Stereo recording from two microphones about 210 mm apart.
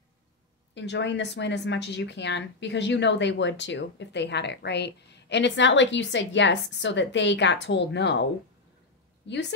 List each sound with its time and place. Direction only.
0.7 s a woman's voice: 55° left (ahead or behind)